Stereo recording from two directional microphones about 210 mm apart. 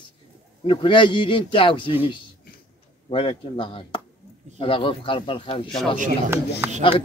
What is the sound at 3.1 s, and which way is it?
Speech, 25° left (ahead or behind).